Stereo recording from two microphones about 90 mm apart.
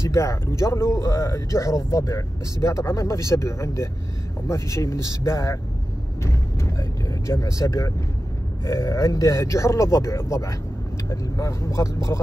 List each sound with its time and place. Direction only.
0.0 s speech: 35° left (ahead or behind)